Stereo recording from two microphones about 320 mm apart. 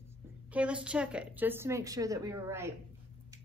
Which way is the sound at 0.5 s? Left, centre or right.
Centre.